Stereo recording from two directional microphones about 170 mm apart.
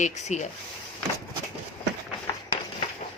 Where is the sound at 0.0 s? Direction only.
40° left (ahead or behind).